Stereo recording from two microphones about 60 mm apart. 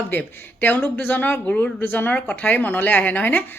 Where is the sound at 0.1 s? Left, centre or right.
Left.